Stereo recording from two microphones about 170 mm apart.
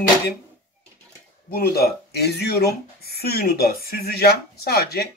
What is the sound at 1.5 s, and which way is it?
Speech, 60° left (ahead or behind).